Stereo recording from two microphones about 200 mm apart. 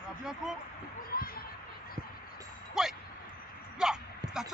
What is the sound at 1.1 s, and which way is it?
Basketball bounce, 45° left (ahead or behind).